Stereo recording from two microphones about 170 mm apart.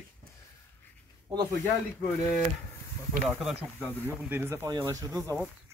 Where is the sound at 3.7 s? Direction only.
10° left (ahead or behind).